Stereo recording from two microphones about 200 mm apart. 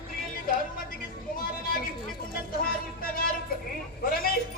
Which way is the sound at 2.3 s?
45° left (ahead or behind).